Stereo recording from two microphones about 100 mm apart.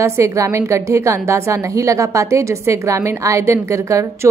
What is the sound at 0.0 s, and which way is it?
A woman's voice, 30° right (ahead or behind).